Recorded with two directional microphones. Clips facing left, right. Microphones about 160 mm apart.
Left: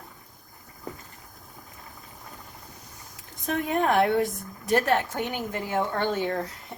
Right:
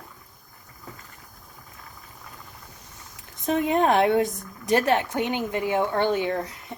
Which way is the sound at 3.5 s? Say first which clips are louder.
Right 4 dB; 20° right (ahead or behind).